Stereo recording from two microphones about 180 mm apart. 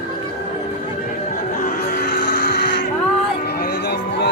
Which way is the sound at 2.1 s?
50° left (ahead or behind).